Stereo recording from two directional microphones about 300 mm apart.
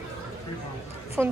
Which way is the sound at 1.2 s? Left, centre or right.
Centre.